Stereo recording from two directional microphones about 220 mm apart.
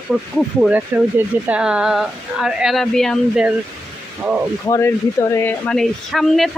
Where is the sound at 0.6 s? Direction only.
5° right (ahead or behind).